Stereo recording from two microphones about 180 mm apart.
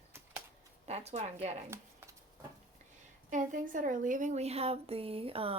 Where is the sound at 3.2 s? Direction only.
45° right (ahead or behind).